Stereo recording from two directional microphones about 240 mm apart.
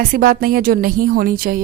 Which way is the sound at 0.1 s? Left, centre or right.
Right.